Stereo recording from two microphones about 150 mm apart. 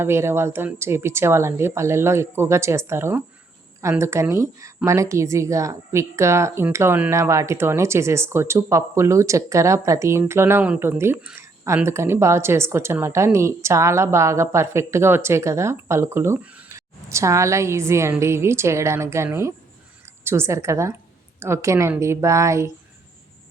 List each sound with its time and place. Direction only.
0.0 s speech: 15° right (ahead or behind)